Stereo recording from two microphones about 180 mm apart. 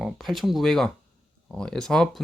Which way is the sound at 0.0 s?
Centre (ahead or behind).